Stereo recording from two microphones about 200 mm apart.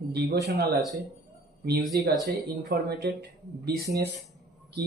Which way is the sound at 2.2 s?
50° right (ahead or behind).